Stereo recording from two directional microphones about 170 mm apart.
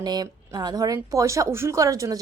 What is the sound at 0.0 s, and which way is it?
A woman's voice, 25° right (ahead or behind).